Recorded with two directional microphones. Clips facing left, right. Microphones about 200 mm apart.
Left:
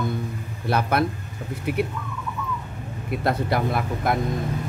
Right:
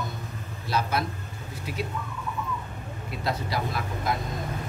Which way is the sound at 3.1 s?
55° left (ahead or behind).